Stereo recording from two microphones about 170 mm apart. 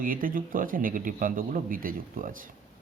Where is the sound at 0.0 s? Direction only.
55° right (ahead or behind).